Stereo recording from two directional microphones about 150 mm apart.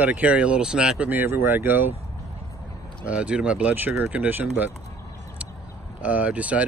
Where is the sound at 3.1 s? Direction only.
10° right (ahead or behind).